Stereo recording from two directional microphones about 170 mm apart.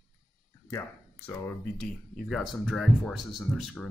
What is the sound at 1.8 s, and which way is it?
Speech, 5° left (ahead or behind).